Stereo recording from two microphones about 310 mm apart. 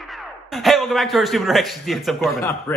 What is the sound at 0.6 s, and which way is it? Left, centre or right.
A man's voice, centre.